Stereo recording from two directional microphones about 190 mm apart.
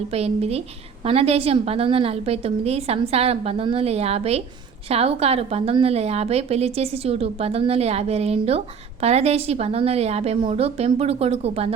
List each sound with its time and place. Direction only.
0.1 s a woman's voice: 30° right (ahead or behind)